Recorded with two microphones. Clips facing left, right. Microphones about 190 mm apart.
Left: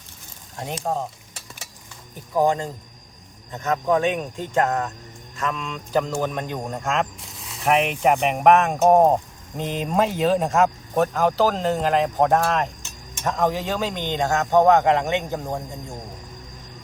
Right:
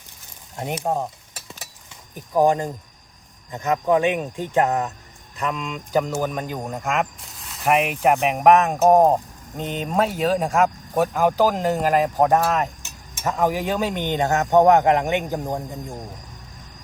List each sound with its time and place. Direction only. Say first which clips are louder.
0.5 s speech: right 2 dB; 20° right (ahead or behind)
2.3 s speech: right 2 dB; 15° right (ahead or behind)